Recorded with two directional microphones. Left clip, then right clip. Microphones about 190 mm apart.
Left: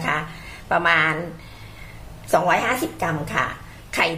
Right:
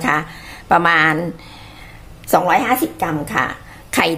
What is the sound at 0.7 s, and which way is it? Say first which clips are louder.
Speech: right 5 dB; 50° right (ahead or behind).